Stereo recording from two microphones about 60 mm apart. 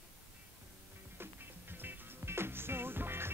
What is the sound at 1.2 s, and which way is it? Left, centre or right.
Music, right.